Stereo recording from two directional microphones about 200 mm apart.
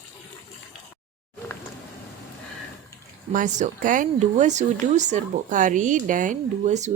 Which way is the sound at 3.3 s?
35° right (ahead or behind).